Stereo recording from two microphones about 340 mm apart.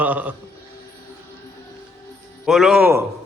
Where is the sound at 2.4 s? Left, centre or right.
Centre.